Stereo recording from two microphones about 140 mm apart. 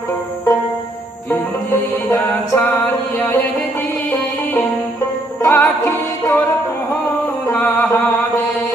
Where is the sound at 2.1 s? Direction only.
15° left (ahead or behind).